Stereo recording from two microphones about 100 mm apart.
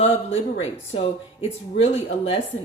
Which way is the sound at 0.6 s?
90° left.